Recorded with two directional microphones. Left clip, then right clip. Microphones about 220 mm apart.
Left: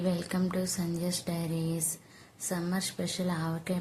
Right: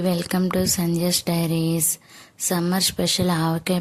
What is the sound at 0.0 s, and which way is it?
Speech, 40° right (ahead or behind).